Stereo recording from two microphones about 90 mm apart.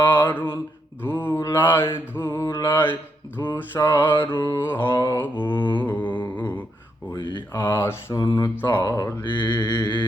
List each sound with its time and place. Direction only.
0.0 s mantra: 20° left (ahead or behind)
3.5 s mantra: 35° left (ahead or behind)
4.9 s speech: 35° left (ahead or behind)
5.5 s mantra: 60° left (ahead or behind)
5.8 s humming: 20° left (ahead or behind)
6.3 s a sound: 20° left (ahead or behind)
7.2 s mantra: 55° left (ahead or behind)
7.7 s mantra: 25° left (ahead or behind)
8.1 s speech: 50° left (ahead or behind)
8.8 s speech: 35° left (ahead or behind)
9.2 s mantra: 60° left (ahead or behind)